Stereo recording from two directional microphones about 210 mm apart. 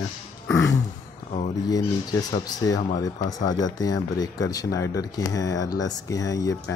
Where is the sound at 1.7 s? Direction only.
20° left (ahead or behind).